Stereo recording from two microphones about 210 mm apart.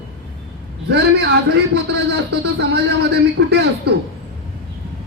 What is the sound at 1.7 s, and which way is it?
Speech, 55° right (ahead or behind).